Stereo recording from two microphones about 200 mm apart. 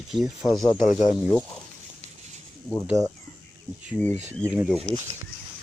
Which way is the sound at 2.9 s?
5° right (ahead or behind).